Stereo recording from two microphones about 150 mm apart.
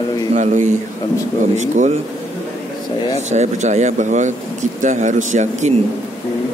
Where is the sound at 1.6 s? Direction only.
50° right (ahead or behind).